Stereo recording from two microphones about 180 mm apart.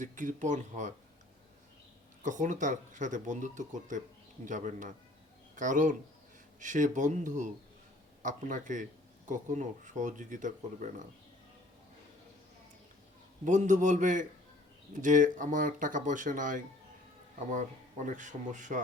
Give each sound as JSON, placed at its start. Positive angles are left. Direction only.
{"t": 0.0, "sound": "speech", "side_deg": -45}
{"t": 2.2, "sound": "speech", "side_deg": -45}
{"t": 13.4, "sound": "speech", "side_deg": -40}